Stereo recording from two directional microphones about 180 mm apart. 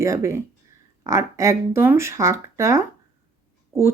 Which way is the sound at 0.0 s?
15° right (ahead or behind).